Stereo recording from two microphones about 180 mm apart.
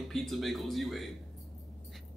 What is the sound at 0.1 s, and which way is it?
Speech, centre (ahead or behind).